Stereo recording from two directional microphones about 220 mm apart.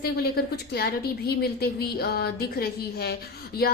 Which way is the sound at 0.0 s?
45° left (ahead or behind).